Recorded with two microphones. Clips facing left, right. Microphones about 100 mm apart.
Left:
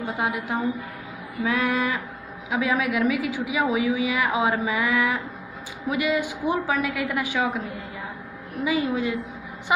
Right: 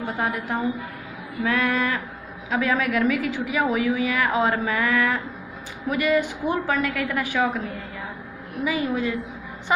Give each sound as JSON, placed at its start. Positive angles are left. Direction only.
{"t": 1.4, "sound": "a woman's voice", "side_deg": 15}
{"t": 8.6, "sound": "a woman's voice", "side_deg": 25}